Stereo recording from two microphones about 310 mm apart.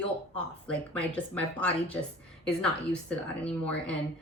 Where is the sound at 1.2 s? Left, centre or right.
Centre.